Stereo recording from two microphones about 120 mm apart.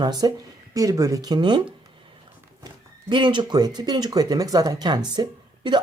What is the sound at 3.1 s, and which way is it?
Speech, 40° right (ahead or behind).